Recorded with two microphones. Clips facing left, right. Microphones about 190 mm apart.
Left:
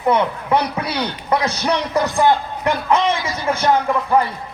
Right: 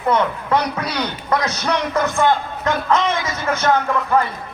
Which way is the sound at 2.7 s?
15° left (ahead or behind).